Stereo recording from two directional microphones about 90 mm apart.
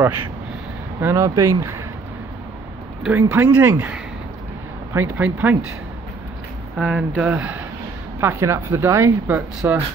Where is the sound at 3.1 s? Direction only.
20° right (ahead or behind).